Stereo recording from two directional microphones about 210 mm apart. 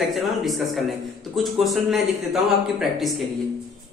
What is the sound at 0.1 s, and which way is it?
Speech, centre (ahead or behind).